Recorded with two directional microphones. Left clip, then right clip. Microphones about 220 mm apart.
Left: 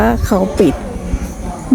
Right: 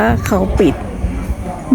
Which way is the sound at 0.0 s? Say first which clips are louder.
Left 1 dB; 5° left (ahead or behind).